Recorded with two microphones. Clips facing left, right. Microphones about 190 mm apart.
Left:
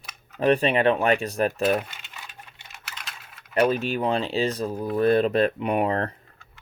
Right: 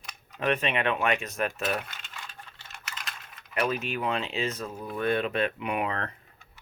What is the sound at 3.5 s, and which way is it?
Speech, 35° left (ahead or behind).